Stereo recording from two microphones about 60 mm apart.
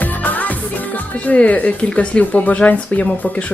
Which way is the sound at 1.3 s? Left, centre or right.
Left.